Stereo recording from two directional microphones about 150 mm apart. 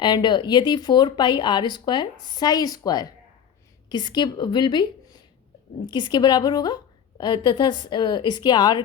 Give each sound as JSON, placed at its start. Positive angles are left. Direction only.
{"t": 0.0, "sound": "a woman's voice", "side_deg": 30}